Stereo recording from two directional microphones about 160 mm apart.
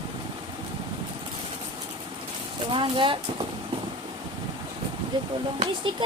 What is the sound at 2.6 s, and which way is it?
Speech, 30° right (ahead or behind).